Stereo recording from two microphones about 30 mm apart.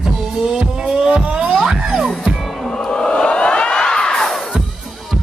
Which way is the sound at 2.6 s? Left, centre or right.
Centre.